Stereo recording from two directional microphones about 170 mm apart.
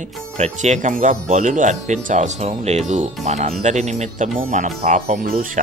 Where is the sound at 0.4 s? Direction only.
45° right (ahead or behind).